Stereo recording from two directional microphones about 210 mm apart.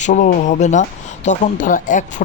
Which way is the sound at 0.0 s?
35° left (ahead or behind).